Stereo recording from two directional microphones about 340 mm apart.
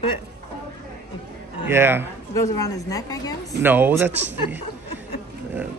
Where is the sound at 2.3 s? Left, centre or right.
Centre.